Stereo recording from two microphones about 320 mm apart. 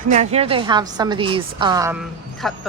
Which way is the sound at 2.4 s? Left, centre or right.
Centre.